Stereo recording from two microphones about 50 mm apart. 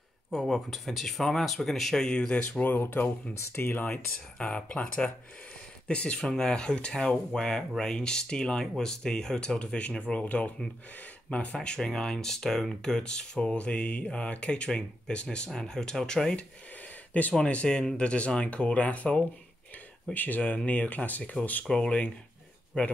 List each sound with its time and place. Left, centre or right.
0.3 s speech: centre
2.0 s speech: centre
2.6 s speech: left
3.3 s speech: left
3.6 s speech: left
4.4 s speech: left
21.6 s speech: centre